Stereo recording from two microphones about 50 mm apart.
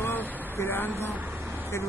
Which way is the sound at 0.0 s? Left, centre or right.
Left.